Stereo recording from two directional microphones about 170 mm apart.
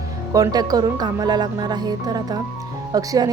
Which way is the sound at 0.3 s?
20° right (ahead or behind).